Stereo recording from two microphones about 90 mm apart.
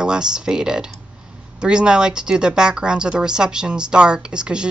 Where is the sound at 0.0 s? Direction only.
10° right (ahead or behind).